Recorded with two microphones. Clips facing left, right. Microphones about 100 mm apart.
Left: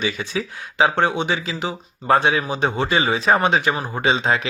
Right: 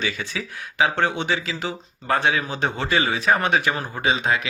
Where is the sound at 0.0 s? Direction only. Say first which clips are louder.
Left 4 dB; 20° left (ahead or behind).